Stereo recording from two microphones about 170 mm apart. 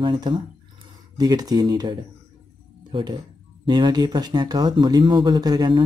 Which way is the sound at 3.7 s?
25° right (ahead or behind).